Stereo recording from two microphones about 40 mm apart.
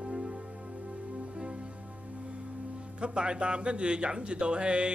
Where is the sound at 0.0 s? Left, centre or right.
Right.